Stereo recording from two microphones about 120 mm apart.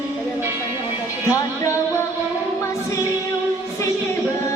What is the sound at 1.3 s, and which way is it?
Music, 25° left (ahead or behind).